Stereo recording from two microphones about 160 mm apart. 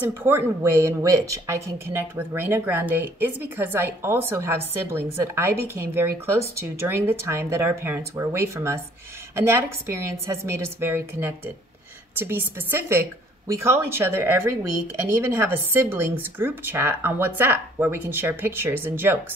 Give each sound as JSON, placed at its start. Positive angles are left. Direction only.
{"t": 0.2, "sound": "a woman's voice", "side_deg": -15}
{"t": 10.2, "sound": "a woman's voice", "side_deg": -20}